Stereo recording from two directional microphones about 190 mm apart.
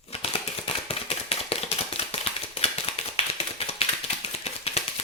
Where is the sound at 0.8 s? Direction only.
30° left (ahead or behind).